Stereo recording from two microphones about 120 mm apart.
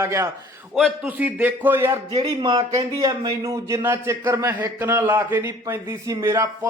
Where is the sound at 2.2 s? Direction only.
40° right (ahead or behind); by 6.5 s 20° right (ahead or behind).